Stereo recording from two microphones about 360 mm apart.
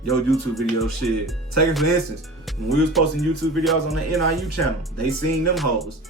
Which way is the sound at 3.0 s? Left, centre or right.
Centre.